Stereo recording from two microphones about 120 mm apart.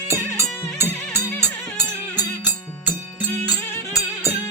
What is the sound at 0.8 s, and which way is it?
Music, 20° right (ahead or behind).